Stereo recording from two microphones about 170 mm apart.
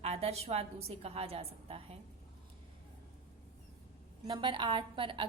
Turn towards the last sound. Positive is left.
turn(degrees=-30)  # may be behind; listen again after turning